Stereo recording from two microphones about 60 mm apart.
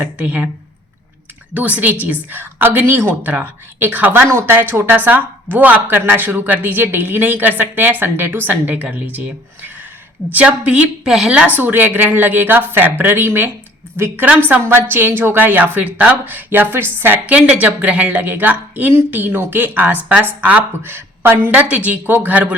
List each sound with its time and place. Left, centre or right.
0.0 s speech: right
1.5 s speech: right
10.3 s speech: right
11.5 s a woman's voice: right
17.2 s speech: right
20.8 s speech: right
21.5 s speech: right